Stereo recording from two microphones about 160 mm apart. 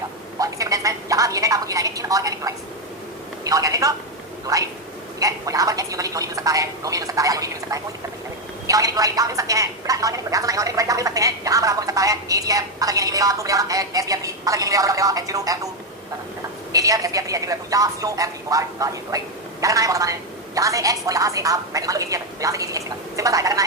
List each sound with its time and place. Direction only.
0.3 s a sound: 20° right (ahead or behind)
3.4 s a woman's voice: 20° right (ahead or behind)
16.7 s a woman's voice: 20° right (ahead or behind)